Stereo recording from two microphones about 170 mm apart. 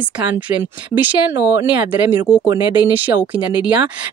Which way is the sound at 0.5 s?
10° right (ahead or behind).